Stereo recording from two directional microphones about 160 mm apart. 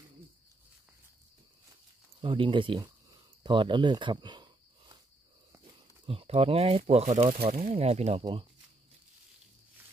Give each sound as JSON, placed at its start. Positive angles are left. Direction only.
{"t": 2.2, "sound": "speech", "side_deg": -30}
{"t": 2.8, "sound": "a sound", "side_deg": -25}
{"t": 6.0, "sound": "speech", "side_deg": -35}